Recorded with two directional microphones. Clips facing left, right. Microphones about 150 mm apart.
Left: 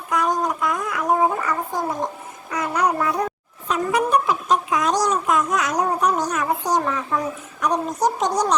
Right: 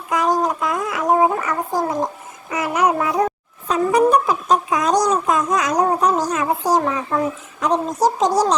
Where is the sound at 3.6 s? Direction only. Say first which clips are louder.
Right 6 dB; 35° right (ahead or behind).